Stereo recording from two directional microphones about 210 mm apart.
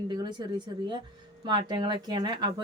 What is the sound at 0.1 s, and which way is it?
Speech, 20° right (ahead or behind).